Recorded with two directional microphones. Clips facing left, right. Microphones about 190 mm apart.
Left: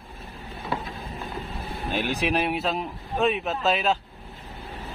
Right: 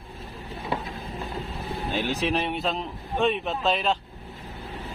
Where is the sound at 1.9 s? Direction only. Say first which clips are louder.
Left 1 dB; 15° left (ahead or behind).